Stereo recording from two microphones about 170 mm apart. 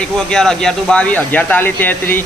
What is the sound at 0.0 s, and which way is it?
Speech, 5° left (ahead or behind).